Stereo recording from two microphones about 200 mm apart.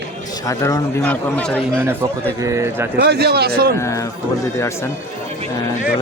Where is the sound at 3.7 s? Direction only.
15° left (ahead or behind).